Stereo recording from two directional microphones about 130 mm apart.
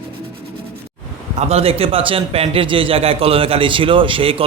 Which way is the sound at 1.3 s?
50° right (ahead or behind).